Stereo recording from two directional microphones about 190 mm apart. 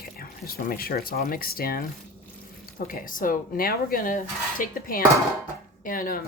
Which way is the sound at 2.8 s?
45° left (ahead or behind).